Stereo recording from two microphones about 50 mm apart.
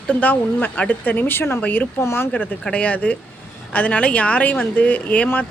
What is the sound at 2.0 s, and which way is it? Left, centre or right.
Speech, left.